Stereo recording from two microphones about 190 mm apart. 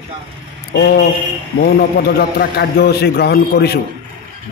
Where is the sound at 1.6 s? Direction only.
55° left (ahead or behind).